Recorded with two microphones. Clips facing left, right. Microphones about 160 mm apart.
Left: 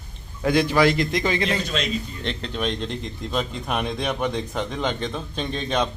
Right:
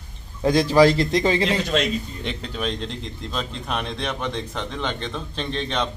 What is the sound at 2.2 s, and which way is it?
A man's voice, 5° right (ahead or behind).